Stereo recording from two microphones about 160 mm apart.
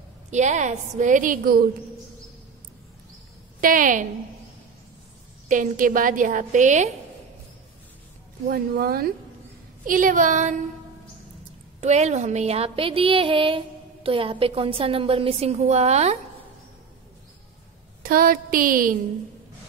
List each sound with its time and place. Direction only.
0.3 s a woman's voice: 50° right (ahead or behind)
3.6 s a woman's voice: 55° right (ahead or behind)
5.5 s a woman's voice: 55° right (ahead or behind)
8.5 s speech: 70° right (ahead or behind)
9.8 s a woman's voice: 55° right (ahead or behind)
11.8 s speech: 45° right (ahead or behind)
18.0 s a woman's voice: 65° right (ahead or behind)